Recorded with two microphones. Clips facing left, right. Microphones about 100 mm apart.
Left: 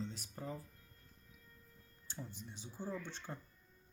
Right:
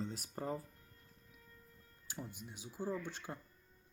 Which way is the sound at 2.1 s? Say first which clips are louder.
Right 2 dB; 10° right (ahead or behind).